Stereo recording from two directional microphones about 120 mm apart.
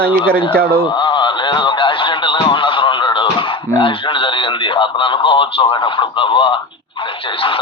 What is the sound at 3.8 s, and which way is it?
Radio, 45° left (ahead or behind).